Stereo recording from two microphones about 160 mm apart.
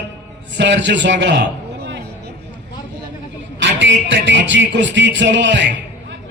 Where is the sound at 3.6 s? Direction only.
90° right.